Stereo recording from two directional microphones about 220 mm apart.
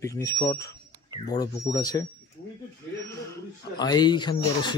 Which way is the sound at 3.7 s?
20° left (ahead or behind).